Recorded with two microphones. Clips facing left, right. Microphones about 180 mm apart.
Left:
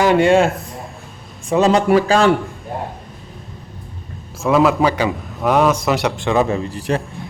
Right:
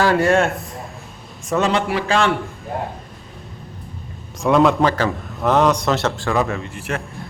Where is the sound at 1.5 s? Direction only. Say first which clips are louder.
Left 5 dB; 35° left (ahead or behind).